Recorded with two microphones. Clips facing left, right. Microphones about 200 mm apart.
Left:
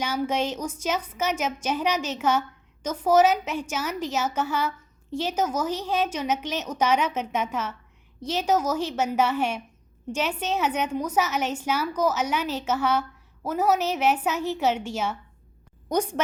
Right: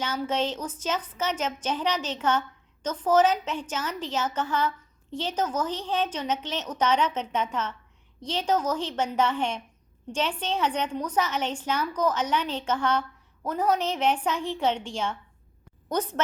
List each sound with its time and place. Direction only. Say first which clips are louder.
0.0 s a woman's voice: left 2 dB; 10° left (ahead or behind)